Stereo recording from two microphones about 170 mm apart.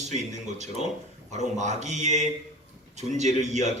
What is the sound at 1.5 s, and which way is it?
A man's voice, 45° right (ahead or behind).